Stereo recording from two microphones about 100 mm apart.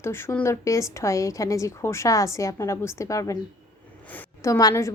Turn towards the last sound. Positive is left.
turn(degrees=30)  # may be behind; listen again after turning